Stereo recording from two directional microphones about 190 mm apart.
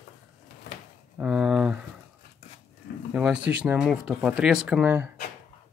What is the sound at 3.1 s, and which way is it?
Speech, 5° right (ahead or behind).